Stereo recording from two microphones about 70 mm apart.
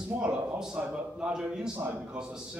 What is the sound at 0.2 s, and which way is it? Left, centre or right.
A man's voice, centre.